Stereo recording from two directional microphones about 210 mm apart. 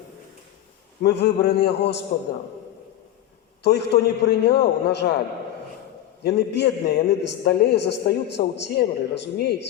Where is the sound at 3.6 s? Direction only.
55° left (ahead or behind).